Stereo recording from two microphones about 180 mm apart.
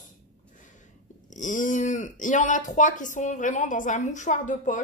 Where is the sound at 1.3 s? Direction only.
45° left (ahead or behind).